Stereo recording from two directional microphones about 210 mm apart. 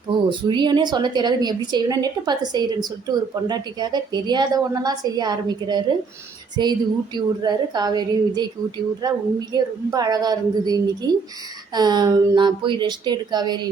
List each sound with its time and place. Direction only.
0.3 s a woman's voice: 20° right (ahead or behind)